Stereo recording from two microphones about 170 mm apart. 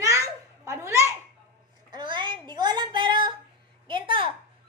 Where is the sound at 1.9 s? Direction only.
25° right (ahead or behind).